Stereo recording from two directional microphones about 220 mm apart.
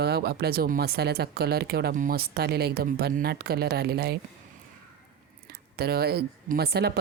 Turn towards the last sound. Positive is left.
turn(degrees=-45)  # may be behind; listen again after turning